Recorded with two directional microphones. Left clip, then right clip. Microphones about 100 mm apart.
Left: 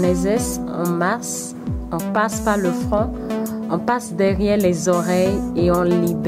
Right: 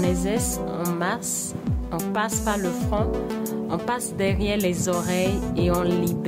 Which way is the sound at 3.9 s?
55° left (ahead or behind).